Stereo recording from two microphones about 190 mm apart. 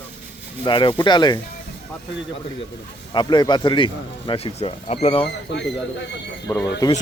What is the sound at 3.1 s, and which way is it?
Speech, 25° left (ahead or behind).